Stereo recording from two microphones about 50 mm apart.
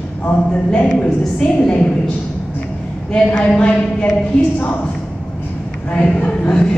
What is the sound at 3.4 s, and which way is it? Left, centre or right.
Speech, centre.